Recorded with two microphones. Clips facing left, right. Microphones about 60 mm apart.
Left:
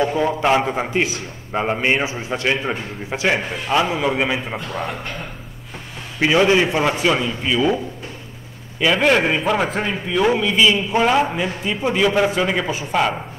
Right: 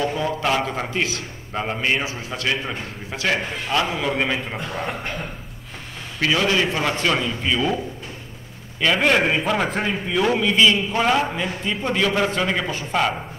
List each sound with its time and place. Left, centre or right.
0.0 s a man's voice: left
6.1 s a man's voice: centre